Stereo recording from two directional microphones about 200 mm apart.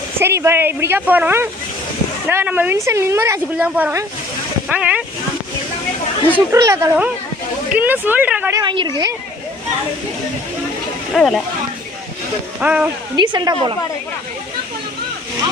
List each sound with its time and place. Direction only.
0.2 s speech: 10° right (ahead or behind)
6.3 s speech: 15° right (ahead or behind)
8.6 s speech: 25° right (ahead or behind)
11.1 s speech: centre (ahead or behind)
12.5 s speech: 5° right (ahead or behind)
13.1 s speech: 20° right (ahead or behind)